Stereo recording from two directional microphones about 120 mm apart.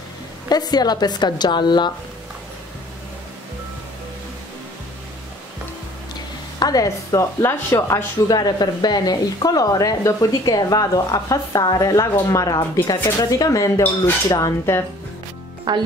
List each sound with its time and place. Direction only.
0.5 s speech: 35° left (ahead or behind)
6.6 s speech: 30° left (ahead or behind)
15.7 s speech: 40° right (ahead or behind)